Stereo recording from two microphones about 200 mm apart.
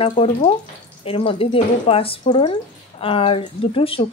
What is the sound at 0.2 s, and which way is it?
Speech, 35° left (ahead or behind).